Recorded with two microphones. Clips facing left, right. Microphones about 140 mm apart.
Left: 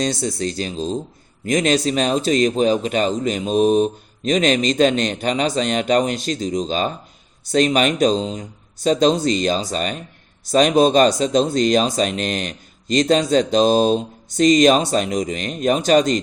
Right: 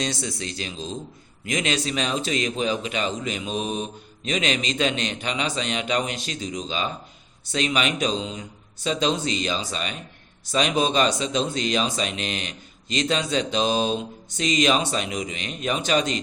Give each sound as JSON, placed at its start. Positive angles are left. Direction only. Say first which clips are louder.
{"t": 0.0, "sound": "speech", "louder": "left 7 dB", "side_deg": 40}